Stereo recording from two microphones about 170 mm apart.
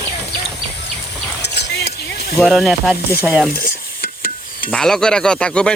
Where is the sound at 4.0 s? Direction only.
55° left (ahead or behind).